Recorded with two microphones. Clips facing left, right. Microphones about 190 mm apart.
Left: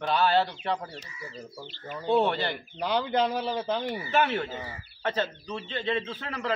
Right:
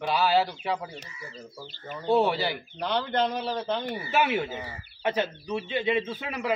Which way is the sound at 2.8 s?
10° left (ahead or behind).